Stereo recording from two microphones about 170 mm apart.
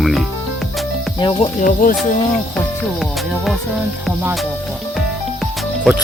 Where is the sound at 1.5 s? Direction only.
55° left (ahead or behind).